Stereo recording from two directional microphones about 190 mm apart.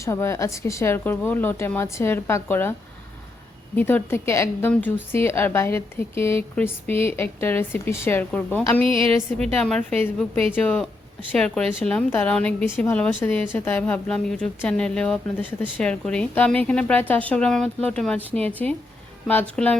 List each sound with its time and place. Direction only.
0.0 s a woman's voice: 15° left (ahead or behind)
3.8 s a woman's voice: 10° left (ahead or behind)
8.8 s a woman's voice: 30° right (ahead or behind)
9.6 s a woman's voice: 5° left (ahead or behind)